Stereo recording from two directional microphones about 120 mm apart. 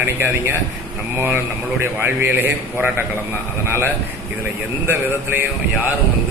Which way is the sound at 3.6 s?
20° right (ahead or behind).